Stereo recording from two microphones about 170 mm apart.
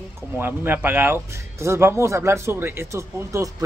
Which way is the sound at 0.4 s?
10° right (ahead or behind).